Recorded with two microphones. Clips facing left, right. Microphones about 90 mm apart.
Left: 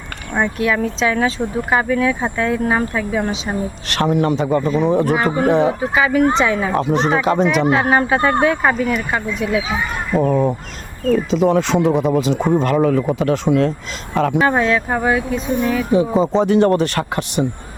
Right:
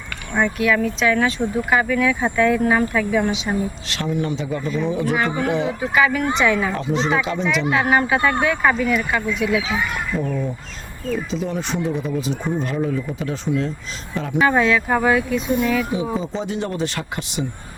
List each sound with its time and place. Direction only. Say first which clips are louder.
0.6 s speech: left 1 dB; 30° left (ahead or behind)
3.8 s speech: left 7 dB; 65° left (ahead or behind); by 5.1 s 50° left (ahead or behind)
5.1 s speech: left 5 dB; 35° left (ahead or behind)
5.5 s speech: left 6 dB; 45° left (ahead or behind)
5.9 s speech: even; 25° left (ahead or behind)
6.7 s speech: left 4 dB; 55° left (ahead or behind)
7.7 s speech: left 3 dB; 35° left (ahead or behind)
10.2 s speech: left 11 dB; 55° left (ahead or behind)
11.1 s speech: left 9 dB; 75° left (ahead or behind)
14.5 s speech: left 1 dB; 35° left (ahead or behind)
16.0 s speech: left 9 dB; 65° left (ahead or behind)